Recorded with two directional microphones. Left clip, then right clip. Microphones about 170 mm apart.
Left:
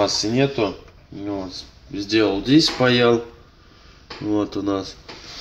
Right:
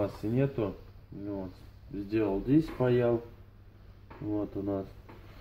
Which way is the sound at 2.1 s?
15° left (ahead or behind).